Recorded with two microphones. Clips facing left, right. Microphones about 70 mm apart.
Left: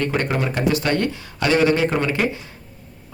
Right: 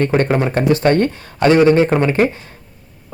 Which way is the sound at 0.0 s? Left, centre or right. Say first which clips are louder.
Right 6 dB; right.